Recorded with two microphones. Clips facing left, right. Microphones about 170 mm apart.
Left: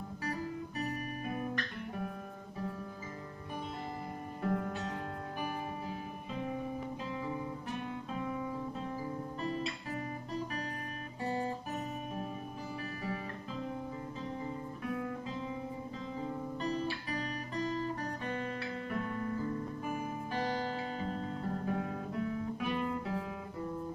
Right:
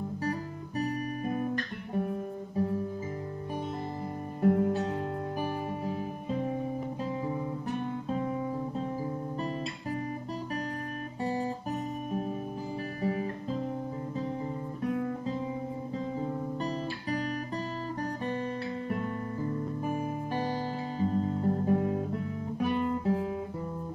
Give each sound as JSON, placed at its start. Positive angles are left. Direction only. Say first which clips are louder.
{"t": 0.7, "sound": "music", "louder": "right 10 dB", "side_deg": -35}
{"t": 4.4, "sound": "music", "louder": "right 10 dB", "side_deg": -30}
{"t": 11.2, "sound": "guitar", "louder": "right 3 dB", "side_deg": -30}
{"t": 13.0, "sound": "guitar", "louder": "right 8 dB", "side_deg": -35}
{"t": 16.6, "sound": "guitar", "louder": "right 2 dB", "side_deg": -35}
{"t": 19.8, "sound": "music", "louder": "right 6 dB", "side_deg": -30}
{"t": 21.0, "sound": "guitar", "louder": "right 9 dB", "side_deg": -30}